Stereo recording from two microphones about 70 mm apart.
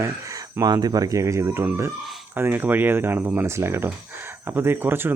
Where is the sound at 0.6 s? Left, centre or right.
Right.